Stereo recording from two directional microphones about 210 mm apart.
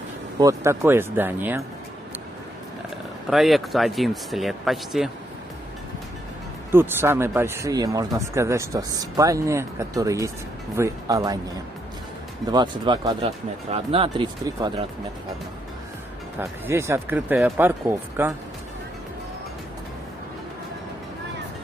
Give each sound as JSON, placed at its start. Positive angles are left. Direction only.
{"t": 0.4, "sound": "speech", "side_deg": -15}
{"t": 3.3, "sound": "speech", "side_deg": 0}
{"t": 6.7, "sound": "speech", "side_deg": -10}
{"t": 12.4, "sound": "speech", "side_deg": -20}
{"t": 16.3, "sound": "speech", "side_deg": -10}